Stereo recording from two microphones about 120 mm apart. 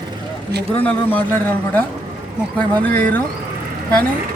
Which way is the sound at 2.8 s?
15° left (ahead or behind).